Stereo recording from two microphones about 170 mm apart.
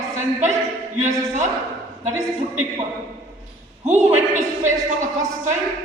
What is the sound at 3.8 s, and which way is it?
Speech, 40° right (ahead or behind).